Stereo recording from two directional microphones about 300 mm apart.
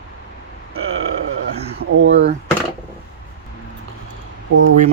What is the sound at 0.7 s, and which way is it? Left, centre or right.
Burping, right.